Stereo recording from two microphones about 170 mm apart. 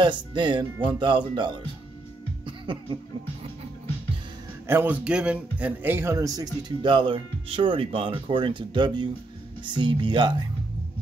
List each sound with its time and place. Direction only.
0.0 s a man's voice: 25° right (ahead or behind)
2.4 s laughter: 30° right (ahead or behind)
4.6 s a man's voice: 10° right (ahead or behind); by 10.3 s 25° right (ahead or behind)